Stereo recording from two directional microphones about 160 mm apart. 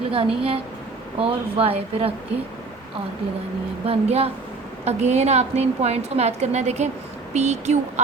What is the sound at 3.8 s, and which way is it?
A woman's voice, 40° right (ahead or behind).